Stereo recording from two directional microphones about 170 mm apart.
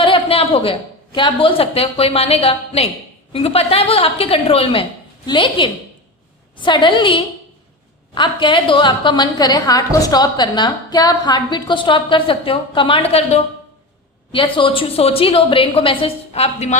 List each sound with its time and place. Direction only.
0.0 s a woman's voice: 30° left (ahead or behind)